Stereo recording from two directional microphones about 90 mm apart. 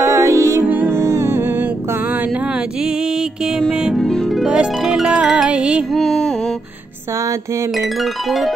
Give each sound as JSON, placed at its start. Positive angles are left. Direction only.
{"t": 0.0, "sound": "music", "side_deg": -35}
{"t": 0.7, "sound": "music", "side_deg": -20}
{"t": 0.9, "sound": "music", "side_deg": -30}
{"t": 2.8, "sound": "music", "side_deg": -10}
{"t": 4.0, "sound": "harp", "side_deg": 5}
{"t": 4.6, "sound": "music", "side_deg": -5}
{"t": 5.9, "sound": "music", "side_deg": 5}
{"t": 7.7, "sound": "music", "side_deg": 0}